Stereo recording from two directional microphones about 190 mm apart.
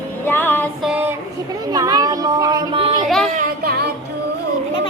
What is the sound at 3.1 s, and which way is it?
Speech, centre (ahead or behind).